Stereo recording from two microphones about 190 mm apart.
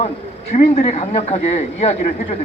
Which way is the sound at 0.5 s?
35° left (ahead or behind).